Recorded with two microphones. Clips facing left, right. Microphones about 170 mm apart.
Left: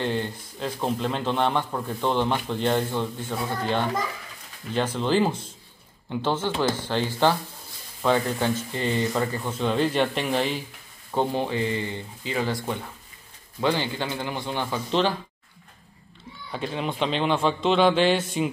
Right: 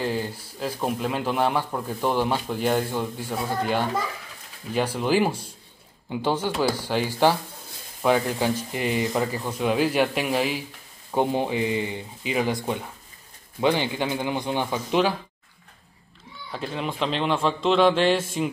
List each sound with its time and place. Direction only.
0.0 s a man's voice: 5° right (ahead or behind)
11.1 s speech: 15° right (ahead or behind)
16.5 s a man's voice: centre (ahead or behind)